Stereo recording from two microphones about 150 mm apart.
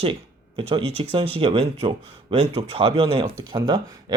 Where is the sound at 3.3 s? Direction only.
25° right (ahead or behind).